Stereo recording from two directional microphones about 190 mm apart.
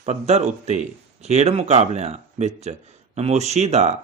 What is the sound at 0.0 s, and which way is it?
Speech, 35° right (ahead or behind).